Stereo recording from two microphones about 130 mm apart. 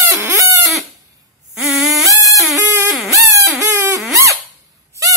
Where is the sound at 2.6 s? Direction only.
15° right (ahead or behind).